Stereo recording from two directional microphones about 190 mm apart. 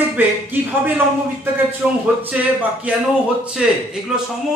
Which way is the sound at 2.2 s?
10° right (ahead or behind).